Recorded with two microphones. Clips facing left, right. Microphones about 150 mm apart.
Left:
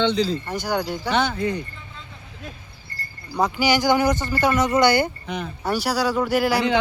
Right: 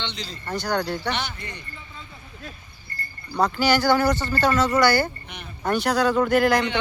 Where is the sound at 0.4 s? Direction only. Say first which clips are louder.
Left 1 dB; 10° left (ahead or behind).